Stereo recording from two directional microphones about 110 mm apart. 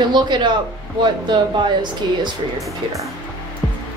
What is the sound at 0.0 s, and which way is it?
Speech, 45° right (ahead or behind).